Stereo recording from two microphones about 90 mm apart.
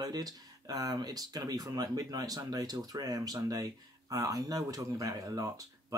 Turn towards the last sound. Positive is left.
turn(degrees=-40)  # may be behind; listen again after turning